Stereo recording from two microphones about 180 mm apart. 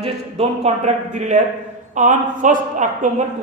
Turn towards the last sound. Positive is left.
turn(degrees=-45)  # may be behind; listen again after turning